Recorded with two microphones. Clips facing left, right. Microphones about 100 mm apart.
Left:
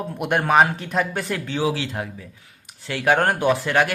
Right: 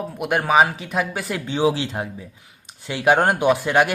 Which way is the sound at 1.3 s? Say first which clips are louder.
Right 4 dB; 20° right (ahead or behind).